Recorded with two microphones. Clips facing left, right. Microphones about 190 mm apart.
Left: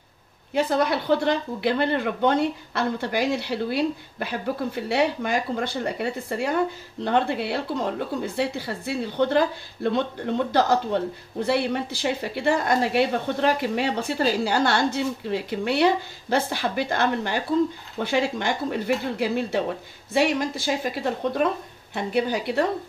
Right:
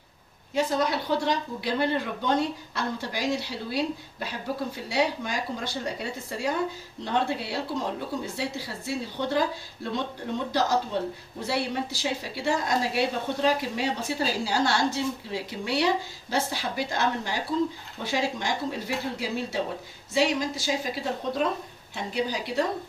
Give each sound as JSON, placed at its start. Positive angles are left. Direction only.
{"t": 0.6, "sound": "speech", "side_deg": 60}